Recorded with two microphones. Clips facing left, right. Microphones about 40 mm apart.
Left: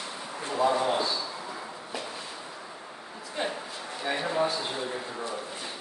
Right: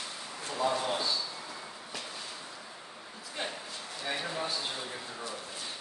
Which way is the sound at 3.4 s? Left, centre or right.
Centre.